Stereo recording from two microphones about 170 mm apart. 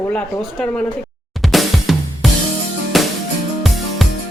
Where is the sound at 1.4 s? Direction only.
Centre (ahead or behind).